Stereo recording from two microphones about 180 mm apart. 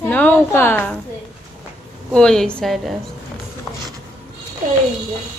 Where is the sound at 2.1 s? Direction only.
5° left (ahead or behind).